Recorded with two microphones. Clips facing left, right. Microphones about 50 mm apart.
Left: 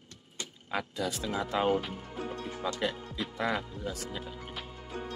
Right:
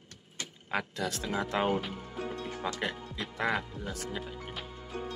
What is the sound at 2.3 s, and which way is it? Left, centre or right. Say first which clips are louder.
Music: left 1 dB; right.